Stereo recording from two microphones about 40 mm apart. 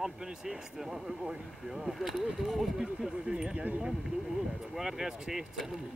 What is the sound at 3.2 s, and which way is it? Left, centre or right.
Speech, centre.